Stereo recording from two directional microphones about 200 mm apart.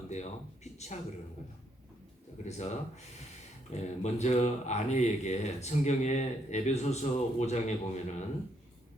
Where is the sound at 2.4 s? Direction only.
35° left (ahead or behind).